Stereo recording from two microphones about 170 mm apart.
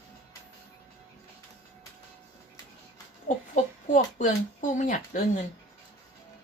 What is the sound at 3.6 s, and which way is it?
Speech, 45° left (ahead or behind).